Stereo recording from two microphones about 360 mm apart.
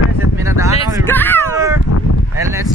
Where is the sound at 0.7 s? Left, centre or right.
Centre.